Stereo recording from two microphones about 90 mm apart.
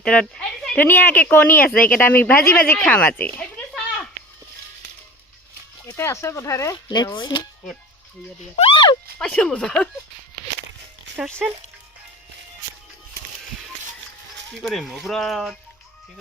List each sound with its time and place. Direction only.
0.0 s speech: 10° left (ahead or behind)
0.8 s speech: 20° left (ahead or behind)
6.0 s speech: 35° left (ahead or behind)
6.8 s speech: 60° left (ahead or behind)
8.6 s speech: 65° left (ahead or behind)
9.1 s speech: 10° left (ahead or behind)
11.4 s speech: 5° right (ahead or behind)
14.7 s speech: centre (ahead or behind)